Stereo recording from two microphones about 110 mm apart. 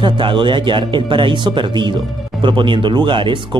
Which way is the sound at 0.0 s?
50° right (ahead or behind).